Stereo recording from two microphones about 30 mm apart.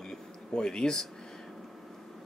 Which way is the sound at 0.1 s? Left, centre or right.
Left.